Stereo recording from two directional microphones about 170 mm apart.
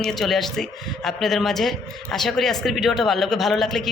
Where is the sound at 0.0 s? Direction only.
Centre (ahead or behind).